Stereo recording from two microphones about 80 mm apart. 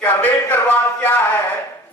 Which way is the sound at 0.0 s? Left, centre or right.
Left.